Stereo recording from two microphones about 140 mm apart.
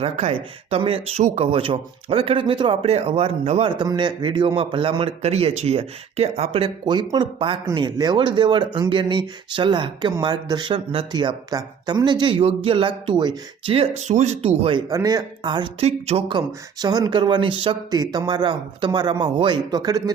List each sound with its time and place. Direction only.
0.0 s a man's voice: 45° right (ahead or behind)
3.8 s a man's voice: 35° right (ahead or behind)
14.8 s a man's voice: 25° right (ahead or behind)
15.9 s speech: 45° right (ahead or behind)
16.5 s a man's voice: 25° right (ahead or behind)